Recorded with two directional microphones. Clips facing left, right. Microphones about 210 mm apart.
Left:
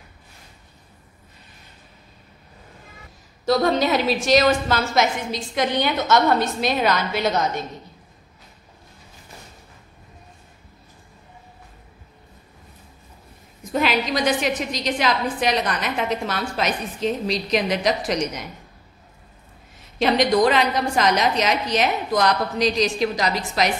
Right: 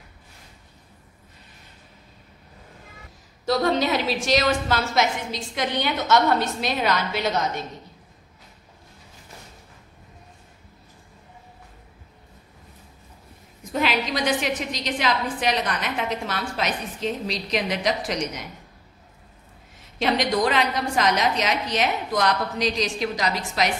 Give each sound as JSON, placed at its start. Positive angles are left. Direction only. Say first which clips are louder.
{"t": 3.4, "sound": "a woman's voice", "louder": "left 3 dB", "side_deg": 45}
{"t": 13.7, "sound": "a woman's voice", "louder": "left 3 dB", "side_deg": 45}
{"t": 20.0, "sound": "a woman's voice", "louder": "left 4 dB", "side_deg": 40}